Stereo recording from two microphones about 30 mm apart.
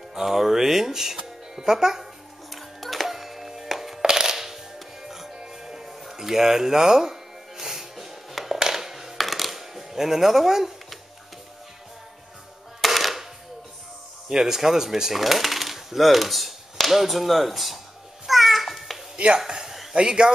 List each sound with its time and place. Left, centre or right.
0.1 s speech: centre
2.5 s music: centre
4.0 s music: right
8.5 s a sound: centre
9.2 s coin: centre
12.8 s cap gun: centre
14.3 s speech: centre
15.1 s speech: centre
18.2 s babbling: centre
19.1 s speech: right
19.4 s a man's voice: right